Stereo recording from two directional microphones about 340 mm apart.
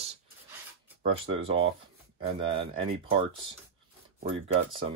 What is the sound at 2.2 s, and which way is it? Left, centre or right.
Speech, centre.